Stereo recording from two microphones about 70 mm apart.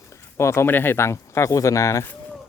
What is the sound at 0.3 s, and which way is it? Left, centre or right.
Speech, left.